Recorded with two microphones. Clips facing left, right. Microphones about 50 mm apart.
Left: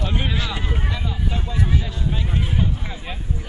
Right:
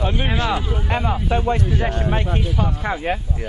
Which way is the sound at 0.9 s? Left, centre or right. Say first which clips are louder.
Right 8 dB; right.